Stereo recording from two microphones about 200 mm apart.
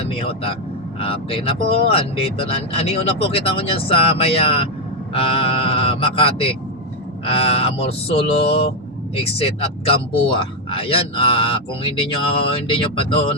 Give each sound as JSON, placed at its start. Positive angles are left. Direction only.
{"t": 0.0, "sound": "speech", "side_deg": 30}